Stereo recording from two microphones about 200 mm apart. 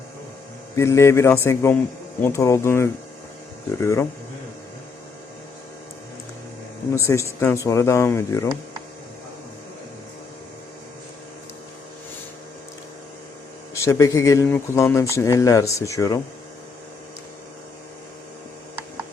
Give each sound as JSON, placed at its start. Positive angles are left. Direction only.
{"t": 0.8, "sound": "speech", "side_deg": 15}
{"t": 6.9, "sound": "speech", "side_deg": 15}
{"t": 13.7, "sound": "speech", "side_deg": 15}